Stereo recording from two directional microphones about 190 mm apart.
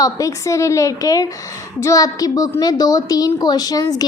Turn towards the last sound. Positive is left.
turn(degrees=20)  # may be behind; listen again after turning